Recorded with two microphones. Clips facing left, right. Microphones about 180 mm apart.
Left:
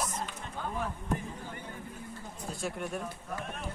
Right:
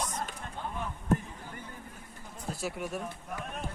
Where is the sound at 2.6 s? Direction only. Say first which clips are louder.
Even; centre (ahead or behind).